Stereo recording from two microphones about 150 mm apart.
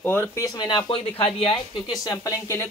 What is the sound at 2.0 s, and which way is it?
Speech, 20° left (ahead or behind).